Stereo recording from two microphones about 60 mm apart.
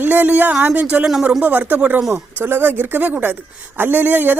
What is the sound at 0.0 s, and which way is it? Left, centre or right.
Speech, right.